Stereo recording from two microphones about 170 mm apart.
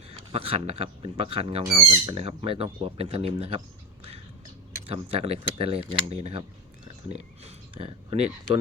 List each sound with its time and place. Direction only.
0.3 s speech: 35° right (ahead or behind)
4.9 s speech: 35° right (ahead or behind)